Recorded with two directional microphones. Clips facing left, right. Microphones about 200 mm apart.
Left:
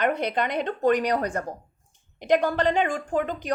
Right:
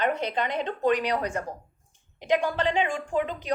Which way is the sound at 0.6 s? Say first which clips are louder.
Left 3 dB; 45° left (ahead or behind).